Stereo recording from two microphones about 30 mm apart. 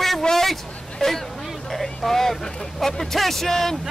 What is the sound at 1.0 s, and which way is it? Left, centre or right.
Speech, centre.